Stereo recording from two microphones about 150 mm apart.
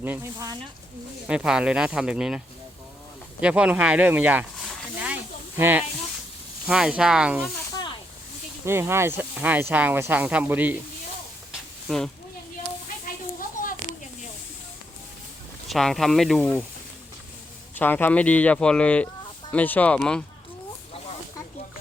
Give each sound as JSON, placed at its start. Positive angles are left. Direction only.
{"t": 0.0, "sound": "speech", "side_deg": -15}
{"t": 1.3, "sound": "speech", "side_deg": -5}
{"t": 3.4, "sound": "speech", "side_deg": -10}
{"t": 4.9, "sound": "snake", "side_deg": -10}
{"t": 6.7, "sound": "speech", "side_deg": -5}
{"t": 8.6, "sound": "speech", "side_deg": -15}
{"t": 11.9, "sound": "speech", "side_deg": 0}
{"t": 13.1, "sound": "a sound", "side_deg": 65}
{"t": 15.6, "sound": "speech", "side_deg": 0}
{"t": 17.7, "sound": "speech", "side_deg": 10}